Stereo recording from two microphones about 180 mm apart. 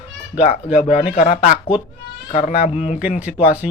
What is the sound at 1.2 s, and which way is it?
A man's voice, 45° left (ahead or behind).